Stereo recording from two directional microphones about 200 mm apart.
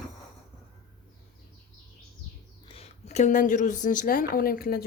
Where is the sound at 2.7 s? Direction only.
30° left (ahead or behind).